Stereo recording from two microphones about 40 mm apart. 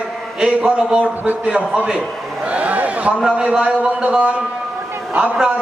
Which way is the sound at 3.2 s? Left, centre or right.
Right.